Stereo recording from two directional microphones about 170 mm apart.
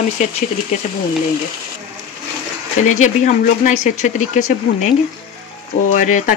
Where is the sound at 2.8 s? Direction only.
45° left (ahead or behind).